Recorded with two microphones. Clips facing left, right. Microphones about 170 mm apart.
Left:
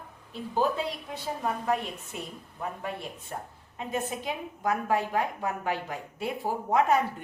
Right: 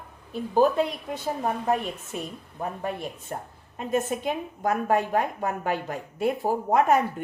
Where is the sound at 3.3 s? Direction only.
40° right (ahead or behind).